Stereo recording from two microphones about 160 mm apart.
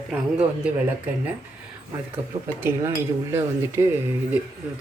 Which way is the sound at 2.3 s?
40° right (ahead or behind).